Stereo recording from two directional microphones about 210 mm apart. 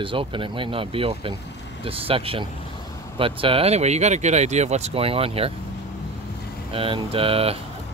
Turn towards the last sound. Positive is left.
turn(degrees=-25)  # may be behind; listen again after turning